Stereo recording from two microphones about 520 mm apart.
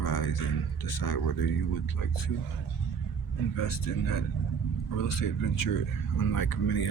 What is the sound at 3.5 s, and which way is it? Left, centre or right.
Speech, left.